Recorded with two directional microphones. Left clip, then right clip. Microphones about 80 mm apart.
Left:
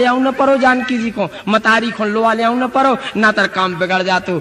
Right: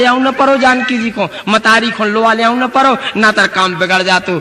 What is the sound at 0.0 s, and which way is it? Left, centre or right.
A man's voice, right.